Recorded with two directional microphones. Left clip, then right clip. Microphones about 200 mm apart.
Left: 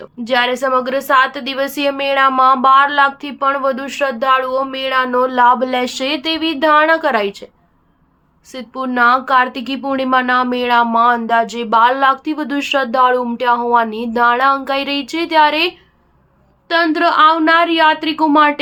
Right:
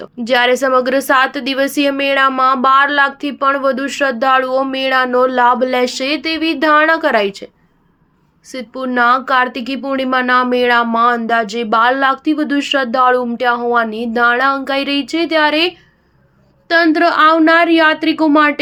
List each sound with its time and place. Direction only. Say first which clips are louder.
0.0 s a woman's voice: right 2 dB; 25° right (ahead or behind)
8.5 s speech: right 1 dB; 15° right (ahead or behind)